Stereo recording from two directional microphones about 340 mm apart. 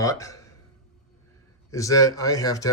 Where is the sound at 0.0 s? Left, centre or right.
Centre.